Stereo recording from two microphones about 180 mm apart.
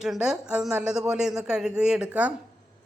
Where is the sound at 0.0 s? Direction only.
5° right (ahead or behind).